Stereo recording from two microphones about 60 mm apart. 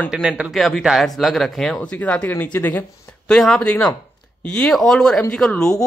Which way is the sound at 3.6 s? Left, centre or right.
Centre.